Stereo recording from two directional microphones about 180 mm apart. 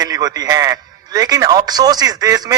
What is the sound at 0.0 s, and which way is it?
A man's voice, 20° right (ahead or behind).